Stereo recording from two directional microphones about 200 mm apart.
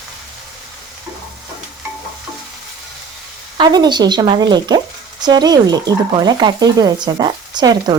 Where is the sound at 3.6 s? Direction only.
20° right (ahead or behind).